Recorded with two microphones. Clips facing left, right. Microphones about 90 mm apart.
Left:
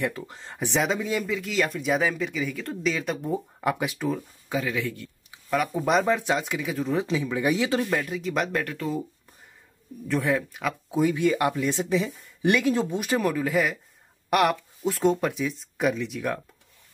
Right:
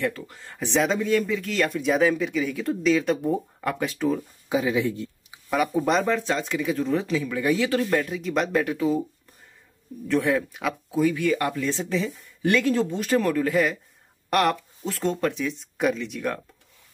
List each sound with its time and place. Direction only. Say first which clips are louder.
0.0 s speech: right 1 dB; 20° left (ahead or behind)
0.7 s speech: right 3 dB; 5° left (ahead or behind)
3.6 s speech: left 3 dB; 15° left (ahead or behind)
4.5 s speech: right 5 dB; 20° right (ahead or behind)
5.5 s speech: right 1 dB; 5° right (ahead or behind)
6.0 s speech: even; 15° left (ahead or behind)
7.0 s speech: even; 20° left (ahead or behind)
7.9 s speech: right 3 dB; centre (ahead or behind)
8.6 s speech: right 7 dB; 10° right (ahead or behind)
10.0 s speech: right 2 dB; centre (ahead or behind)
10.9 s speech: even; 20° left (ahead or behind); by 16.3 s centre (ahead or behind)